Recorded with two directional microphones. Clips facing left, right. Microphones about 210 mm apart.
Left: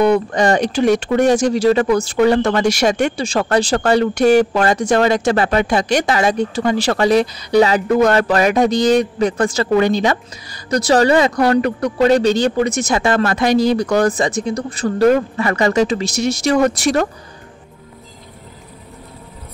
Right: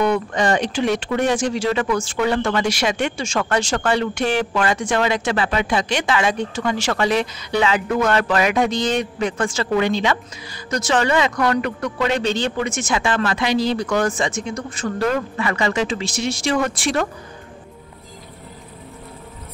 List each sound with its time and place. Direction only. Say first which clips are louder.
0.0 s speech: left 5 dB; 35° left (ahead or behind)